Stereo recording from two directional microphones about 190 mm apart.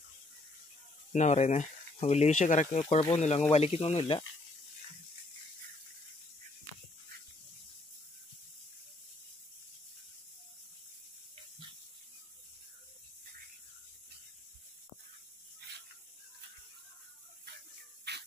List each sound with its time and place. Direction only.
1.1 s speech: 40° left (ahead or behind)
18.1 s spray: 60° right (ahead or behind)